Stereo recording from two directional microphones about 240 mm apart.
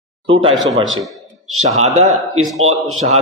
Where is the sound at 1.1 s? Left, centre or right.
Centre.